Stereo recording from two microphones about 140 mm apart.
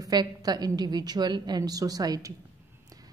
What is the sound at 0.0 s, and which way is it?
A woman's voice, 30° right (ahead or behind).